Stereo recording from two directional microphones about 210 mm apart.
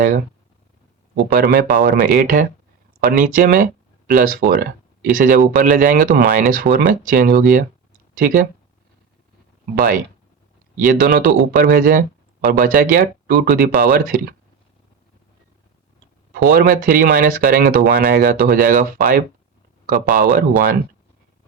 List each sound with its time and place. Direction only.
1.1 s speech: 45° right (ahead or behind)
10.8 s speech: 40° right (ahead or behind)
16.3 s speech: 45° right (ahead or behind)